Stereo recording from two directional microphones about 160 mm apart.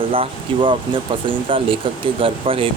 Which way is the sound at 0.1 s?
35° right (ahead or behind).